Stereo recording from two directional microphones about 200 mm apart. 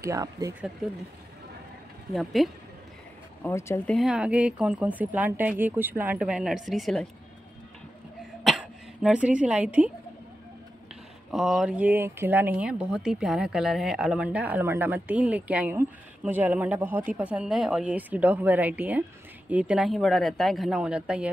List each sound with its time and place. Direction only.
0.0 s speech: 15° right (ahead or behind)
2.1 s speech: centre (ahead or behind)
3.4 s speech: 10° left (ahead or behind)
8.5 s throat clearing: 5° right (ahead or behind)
11.3 s speech: centre (ahead or behind)